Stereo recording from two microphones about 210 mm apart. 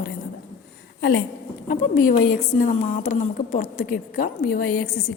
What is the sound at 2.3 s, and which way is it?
A woman's voice, 40° left (ahead or behind).